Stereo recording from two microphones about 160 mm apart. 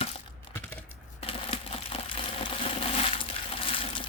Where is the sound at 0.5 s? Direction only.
10° left (ahead or behind).